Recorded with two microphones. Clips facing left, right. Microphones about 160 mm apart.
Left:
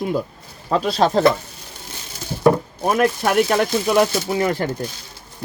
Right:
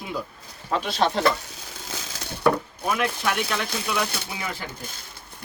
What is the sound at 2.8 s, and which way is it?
Speech, 45° left (ahead or behind).